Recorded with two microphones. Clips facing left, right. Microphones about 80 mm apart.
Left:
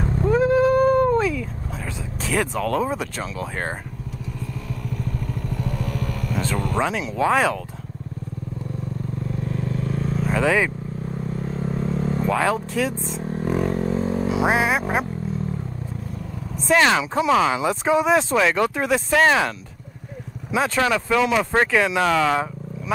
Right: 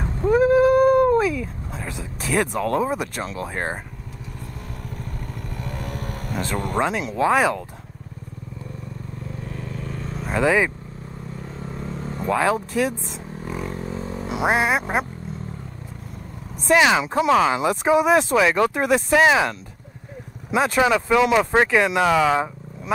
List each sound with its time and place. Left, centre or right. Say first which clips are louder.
0.3 s cat: right 2 dB; centre
2.0 s a sound: right 1 dB; centre
2.6 s speech: right 1 dB; centre
4.8 s vehicle: left 7 dB; right
5.4 s motorcycle: left 3 dB; right
6.8 s speech: right 1 dB; centre
9.5 s vehicle: left 6 dB; left
10.3 s speech: right 2 dB; centre
11.3 s vehicle: left 7 dB; left
12.3 s speech: right 3 dB; centre
13.2 s a sound: left 9 dB; left
14.4 s speech: right 2 dB; centre
16.6 s speech: right 1 dB; centre
20.5 s speech: right 2 dB; centre